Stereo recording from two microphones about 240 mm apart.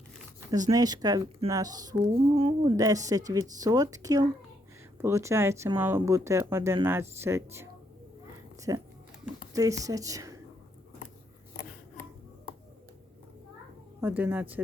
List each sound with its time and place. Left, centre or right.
0.5 s speech: centre
14.0 s speech: centre